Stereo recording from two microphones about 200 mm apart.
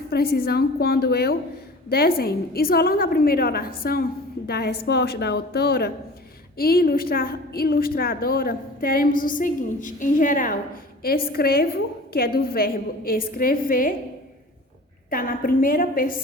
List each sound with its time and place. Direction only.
0.1 s a woman's voice: 50° left (ahead or behind)
15.1 s a woman's voice: 45° left (ahead or behind)